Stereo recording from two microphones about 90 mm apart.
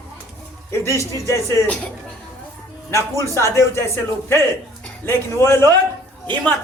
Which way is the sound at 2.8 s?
30° left (ahead or behind).